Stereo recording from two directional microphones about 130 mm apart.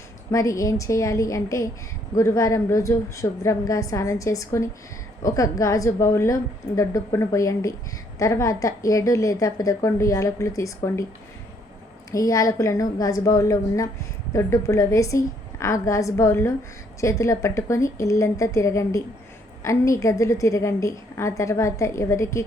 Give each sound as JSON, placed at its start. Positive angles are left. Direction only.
{"t": 0.3, "sound": "a woman's voice", "side_deg": 25}
{"t": 12.1, "sound": "a woman's voice", "side_deg": 25}